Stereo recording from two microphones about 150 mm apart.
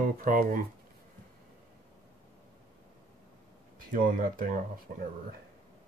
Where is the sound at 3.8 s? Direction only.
65° right (ahead or behind).